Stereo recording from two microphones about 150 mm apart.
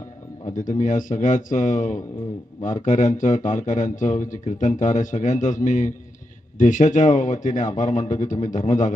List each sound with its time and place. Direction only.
0.4 s speech: 60° left (ahead or behind)